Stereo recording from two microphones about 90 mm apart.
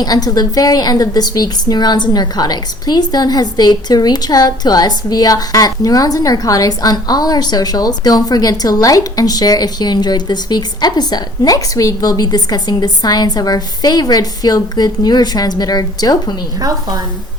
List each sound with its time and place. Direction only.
0.0 s a woman's voice: 45° left (ahead or behind)
16.6 s a woman's voice: 45° right (ahead or behind)